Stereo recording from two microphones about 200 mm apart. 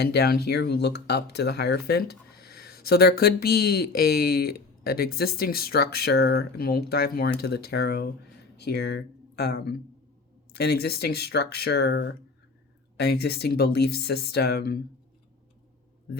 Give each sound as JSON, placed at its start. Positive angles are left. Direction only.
{"t": 0.0, "sound": "speech", "side_deg": 55}